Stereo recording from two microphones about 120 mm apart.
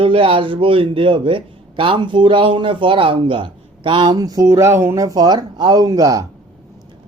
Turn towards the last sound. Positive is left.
turn(degrees=-30)  # may be behind; listen again after turning